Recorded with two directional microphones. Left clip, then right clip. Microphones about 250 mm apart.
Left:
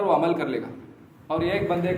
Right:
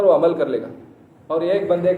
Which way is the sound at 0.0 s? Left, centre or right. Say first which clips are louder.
Right 7 dB; left.